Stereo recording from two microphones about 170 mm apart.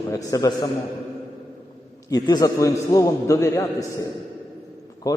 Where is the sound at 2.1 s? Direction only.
20° left (ahead or behind).